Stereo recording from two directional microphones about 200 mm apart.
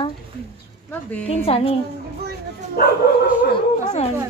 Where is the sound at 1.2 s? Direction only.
30° left (ahead or behind).